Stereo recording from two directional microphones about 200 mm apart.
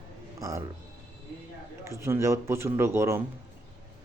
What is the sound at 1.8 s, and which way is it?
A man's voice, 15° right (ahead or behind).